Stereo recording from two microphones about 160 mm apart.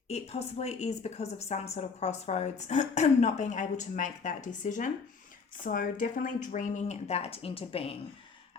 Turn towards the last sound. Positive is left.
turn(degrees=35)  # may be behind; listen again after turning